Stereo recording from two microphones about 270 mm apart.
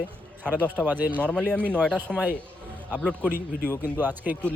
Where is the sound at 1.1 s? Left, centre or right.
Centre.